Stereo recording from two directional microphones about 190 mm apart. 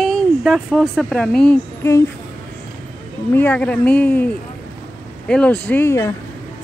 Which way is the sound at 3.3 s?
10° left (ahead or behind).